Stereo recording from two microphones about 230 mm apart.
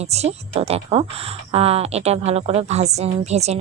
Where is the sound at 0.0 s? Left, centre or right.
Right.